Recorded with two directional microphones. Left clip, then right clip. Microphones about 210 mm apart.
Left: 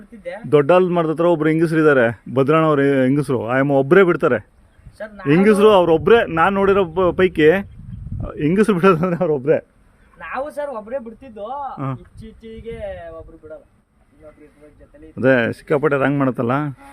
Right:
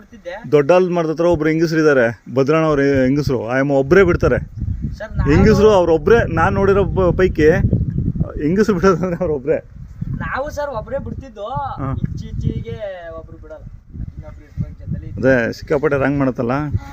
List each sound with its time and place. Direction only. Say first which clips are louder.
0.5 s a man's voice: right 1 dB; 5° left (ahead or behind)
4.9 s speech: right 1 dB; 15° left (ahead or behind)
5.2 s a man's voice: even; 5° left (ahead or behind); by 9.6 s 20° left (ahead or behind)
10.2 s a man's voice: right 3 dB; centre (ahead or behind)
15.1 s a man's voice: right 1 dB; 5° left (ahead or behind)